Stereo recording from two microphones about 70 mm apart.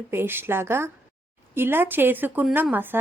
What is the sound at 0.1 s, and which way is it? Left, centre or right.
A woman's voice, right.